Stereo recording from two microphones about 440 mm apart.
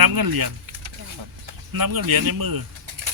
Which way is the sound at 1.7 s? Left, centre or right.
Right.